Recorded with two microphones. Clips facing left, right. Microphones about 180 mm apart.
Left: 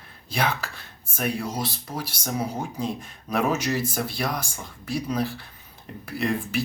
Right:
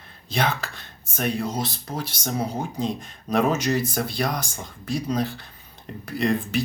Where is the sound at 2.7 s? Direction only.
5° left (ahead or behind).